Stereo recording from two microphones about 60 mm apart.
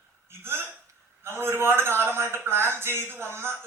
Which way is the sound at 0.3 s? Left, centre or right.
Right.